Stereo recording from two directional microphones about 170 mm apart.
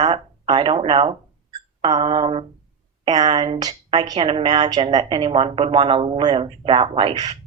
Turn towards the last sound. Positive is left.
turn(degrees=-25)  # may be behind; listen again after turning